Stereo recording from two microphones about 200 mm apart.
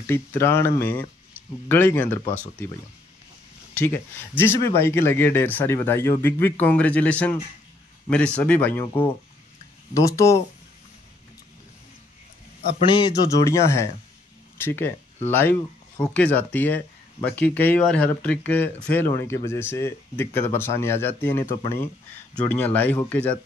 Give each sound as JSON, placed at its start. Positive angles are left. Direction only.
{"t": 0.0, "sound": "speech", "side_deg": 10}
{"t": 3.8, "sound": "speech", "side_deg": 10}
{"t": 9.9, "sound": "speech", "side_deg": 15}
{"t": 12.7, "sound": "a man's voice", "side_deg": 25}
{"t": 16.0, "sound": "speech", "side_deg": 5}